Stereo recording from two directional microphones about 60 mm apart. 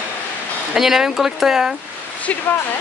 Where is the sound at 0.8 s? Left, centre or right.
Centre.